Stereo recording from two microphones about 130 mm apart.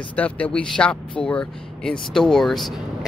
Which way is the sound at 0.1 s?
10° left (ahead or behind).